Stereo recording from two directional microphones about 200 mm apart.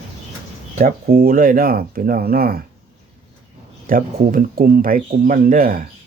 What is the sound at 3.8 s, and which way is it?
Speech, 45° right (ahead or behind).